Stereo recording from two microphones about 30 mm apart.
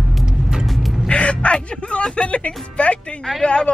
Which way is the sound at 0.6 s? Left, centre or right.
Centre.